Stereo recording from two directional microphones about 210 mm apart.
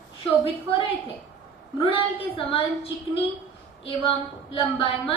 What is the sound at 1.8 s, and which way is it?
Speech, 25° left (ahead or behind).